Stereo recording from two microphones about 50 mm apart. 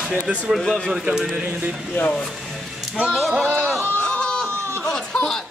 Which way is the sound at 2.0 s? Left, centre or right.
Left.